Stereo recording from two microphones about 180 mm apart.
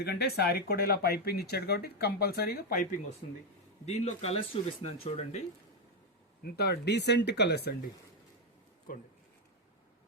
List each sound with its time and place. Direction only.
0.0 s speech: 60° left (ahead or behind)
3.8 s speech: 35° left (ahead or behind)
6.4 s speech: 60° left (ahead or behind)
8.9 s speech: 50° left (ahead or behind)